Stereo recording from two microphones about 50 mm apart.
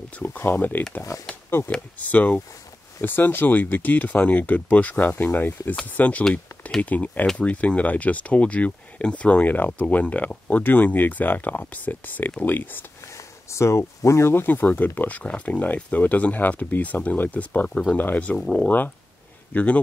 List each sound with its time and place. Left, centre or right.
0.5 s speech: left
2.0 s speech: left
3.0 s speech: left
13.0 s a sound: left
14.3 s speech: left
19.5 s speech: left